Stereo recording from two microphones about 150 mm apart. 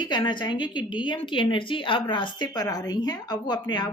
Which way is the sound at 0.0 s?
30° left (ahead or behind).